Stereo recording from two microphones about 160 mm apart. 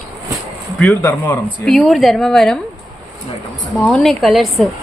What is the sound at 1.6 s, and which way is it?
Speech, centre (ahead or behind).